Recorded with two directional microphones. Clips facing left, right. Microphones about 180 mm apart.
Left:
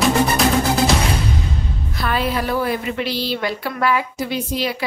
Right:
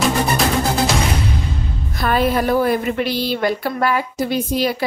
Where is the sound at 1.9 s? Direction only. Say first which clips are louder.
Right 4 dB; 45° right (ahead or behind).